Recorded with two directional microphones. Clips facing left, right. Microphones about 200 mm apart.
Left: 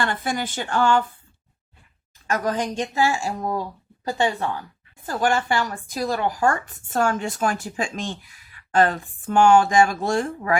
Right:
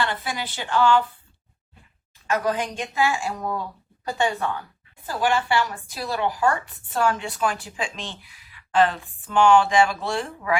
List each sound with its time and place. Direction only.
0.0 s speech: 50° left (ahead or behind)
2.2 s a woman's voice: 45° left (ahead or behind)
5.0 s speech: 45° left (ahead or behind)